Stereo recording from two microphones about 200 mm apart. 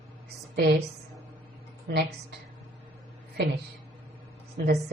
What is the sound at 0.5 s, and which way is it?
Speech, 50° right (ahead or behind).